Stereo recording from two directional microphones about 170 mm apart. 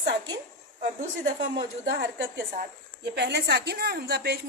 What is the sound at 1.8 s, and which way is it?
A woman's voice, 90° right.